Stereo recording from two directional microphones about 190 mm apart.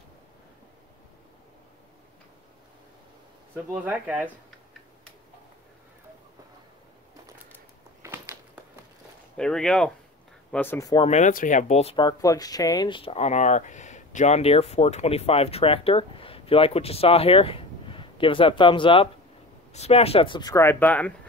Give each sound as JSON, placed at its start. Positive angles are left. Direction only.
{"t": 3.5, "sound": "speech", "side_deg": -10}
{"t": 8.0, "sound": "a sound", "side_deg": -10}
{"t": 9.4, "sound": "speech", "side_deg": 5}
{"t": 11.1, "sound": "speech", "side_deg": 40}